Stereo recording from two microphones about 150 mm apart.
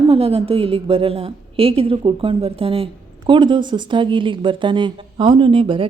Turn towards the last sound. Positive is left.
turn(degrees=-35)  # may be behind; listen again after turning